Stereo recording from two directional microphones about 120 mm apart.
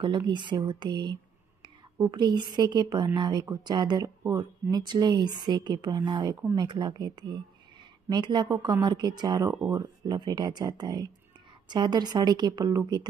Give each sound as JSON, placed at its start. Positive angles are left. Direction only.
{"t": 0.0, "sound": "a woman's voice", "side_deg": -40}